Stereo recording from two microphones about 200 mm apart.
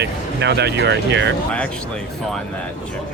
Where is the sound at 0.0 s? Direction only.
55° right (ahead or behind).